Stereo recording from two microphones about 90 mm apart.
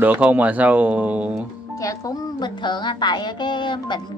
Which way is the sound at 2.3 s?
55° left (ahead or behind).